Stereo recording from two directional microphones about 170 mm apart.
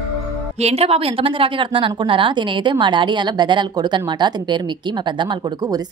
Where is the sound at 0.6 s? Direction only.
40° right (ahead or behind).